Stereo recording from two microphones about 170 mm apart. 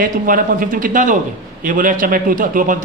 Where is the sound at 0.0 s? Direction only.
55° right (ahead or behind).